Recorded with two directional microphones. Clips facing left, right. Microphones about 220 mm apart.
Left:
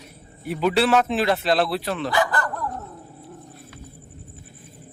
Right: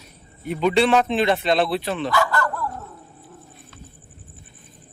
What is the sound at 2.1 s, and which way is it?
Bow-wow, 20° left (ahead or behind).